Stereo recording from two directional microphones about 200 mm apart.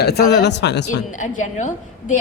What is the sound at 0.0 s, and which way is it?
Speech, 55° left (ahead or behind).